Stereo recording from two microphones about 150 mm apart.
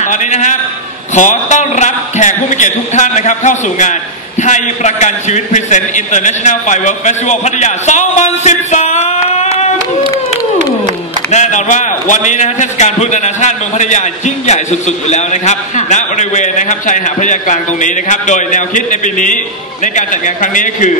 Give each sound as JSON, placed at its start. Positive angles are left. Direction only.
{"t": 0.1, "sound": "a man's voice", "side_deg": 55}
{"t": 11.3, "sound": "a man's voice", "side_deg": 55}